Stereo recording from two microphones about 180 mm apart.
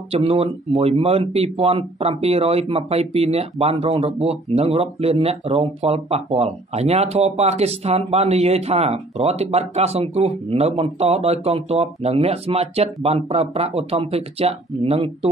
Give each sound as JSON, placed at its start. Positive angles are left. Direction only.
{"t": 0.1, "sound": "speech", "side_deg": -35}